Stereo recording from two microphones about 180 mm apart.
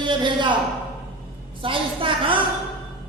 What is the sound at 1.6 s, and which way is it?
Speech, 30° right (ahead or behind).